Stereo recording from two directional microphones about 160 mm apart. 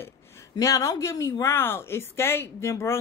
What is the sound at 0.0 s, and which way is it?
Speech, 15° left (ahead or behind).